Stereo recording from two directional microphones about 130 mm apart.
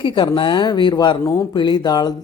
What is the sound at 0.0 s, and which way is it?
Speech, 40° left (ahead or behind).